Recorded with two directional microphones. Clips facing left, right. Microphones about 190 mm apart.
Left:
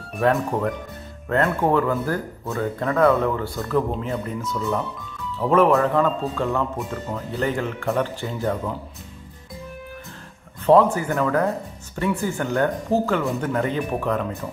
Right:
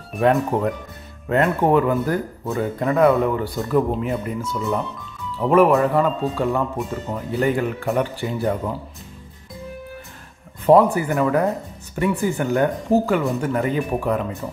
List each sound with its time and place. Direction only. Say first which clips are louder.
0.2 s speech: right 3 dB; 20° right (ahead or behind)
5.5 s speech: right 2 dB; 15° right (ahead or behind)
10.6 s speech: right 2 dB; 15° right (ahead or behind)
13.2 s speech: right 2 dB; 5° right (ahead or behind)